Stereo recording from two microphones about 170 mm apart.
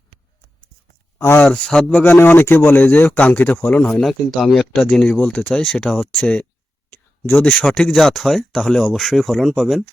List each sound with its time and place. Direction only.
1.2 s a man's voice: 10° left (ahead or behind)